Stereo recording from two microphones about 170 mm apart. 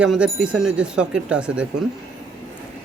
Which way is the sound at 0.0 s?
5° right (ahead or behind).